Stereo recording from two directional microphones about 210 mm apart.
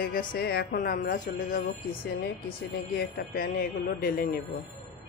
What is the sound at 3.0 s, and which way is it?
A woman's voice, 45° left (ahead or behind).